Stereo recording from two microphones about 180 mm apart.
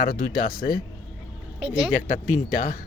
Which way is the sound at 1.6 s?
30° right (ahead or behind).